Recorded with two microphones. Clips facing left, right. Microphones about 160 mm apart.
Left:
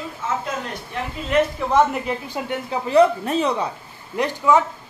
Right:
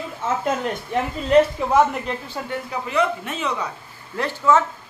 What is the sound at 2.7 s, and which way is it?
Speech, 35° left (ahead or behind).